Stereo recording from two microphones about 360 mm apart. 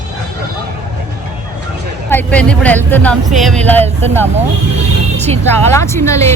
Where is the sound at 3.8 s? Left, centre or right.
Centre.